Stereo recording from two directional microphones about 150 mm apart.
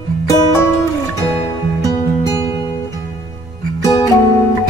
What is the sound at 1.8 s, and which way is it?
Music, 25° left (ahead or behind).